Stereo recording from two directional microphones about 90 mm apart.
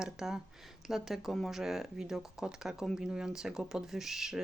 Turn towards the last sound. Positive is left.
turn(degrees=-5)  # may be behind; listen again after turning